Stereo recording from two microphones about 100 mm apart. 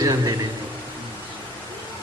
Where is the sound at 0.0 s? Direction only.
35° right (ahead or behind).